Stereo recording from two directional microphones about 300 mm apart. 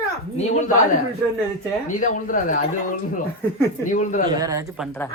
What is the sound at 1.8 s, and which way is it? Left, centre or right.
Speech, left.